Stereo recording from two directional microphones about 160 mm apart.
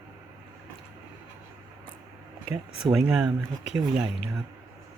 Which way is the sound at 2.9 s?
5° right (ahead or behind).